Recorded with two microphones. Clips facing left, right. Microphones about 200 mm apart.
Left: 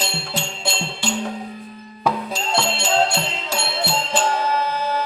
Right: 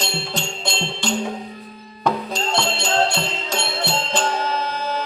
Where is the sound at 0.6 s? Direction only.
5° left (ahead or behind).